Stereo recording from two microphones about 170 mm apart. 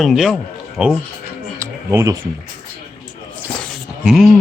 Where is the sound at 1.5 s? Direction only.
15° right (ahead or behind).